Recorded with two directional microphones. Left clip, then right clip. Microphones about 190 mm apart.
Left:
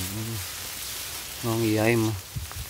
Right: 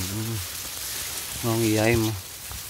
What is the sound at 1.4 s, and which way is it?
Frying, 15° right (ahead or behind).